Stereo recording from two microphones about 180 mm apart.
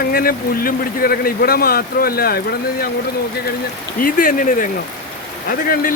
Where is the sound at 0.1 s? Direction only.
55° left (ahead or behind).